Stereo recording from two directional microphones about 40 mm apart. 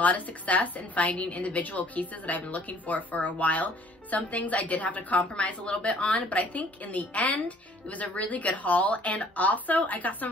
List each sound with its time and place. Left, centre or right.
0.0 s a woman's voice: left